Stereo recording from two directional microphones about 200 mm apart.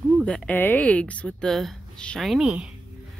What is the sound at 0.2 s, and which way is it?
Speech, 5° left (ahead or behind).